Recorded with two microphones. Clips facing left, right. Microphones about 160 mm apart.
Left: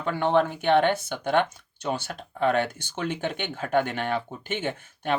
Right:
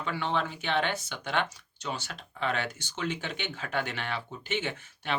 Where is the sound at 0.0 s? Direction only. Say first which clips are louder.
Left 8 dB; 50° left (ahead or behind).